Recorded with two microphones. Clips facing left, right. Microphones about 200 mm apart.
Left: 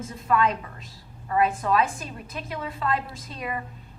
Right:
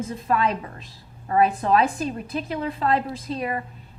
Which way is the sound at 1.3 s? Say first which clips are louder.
Right 3 dB; 35° right (ahead or behind).